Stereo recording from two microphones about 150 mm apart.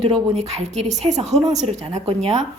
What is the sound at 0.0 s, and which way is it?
Speech, 40° right (ahead or behind).